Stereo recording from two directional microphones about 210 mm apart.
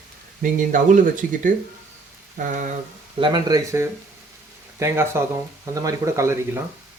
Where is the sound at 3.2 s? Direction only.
20° right (ahead or behind).